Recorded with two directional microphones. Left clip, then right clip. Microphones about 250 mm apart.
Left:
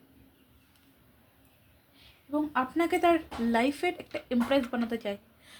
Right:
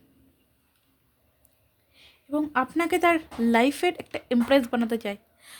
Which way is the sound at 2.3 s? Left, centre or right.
Right.